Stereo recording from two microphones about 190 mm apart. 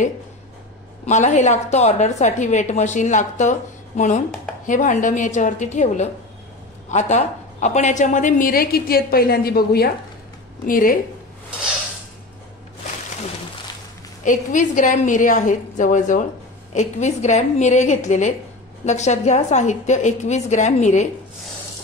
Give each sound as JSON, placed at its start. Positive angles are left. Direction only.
{"t": 1.0, "sound": "a woman's voice", "side_deg": 40}
{"t": 14.2, "sound": "a woman's voice", "side_deg": 40}